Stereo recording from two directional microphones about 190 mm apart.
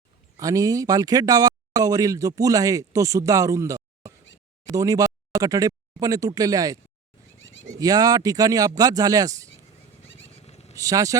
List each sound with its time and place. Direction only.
0.3 s speech: 20° right (ahead or behind)
7.3 s goat: 85° left
7.8 s speech: 20° right (ahead or behind)
10.2 s goat: 35° left (ahead or behind)
10.8 s speech: 15° right (ahead or behind)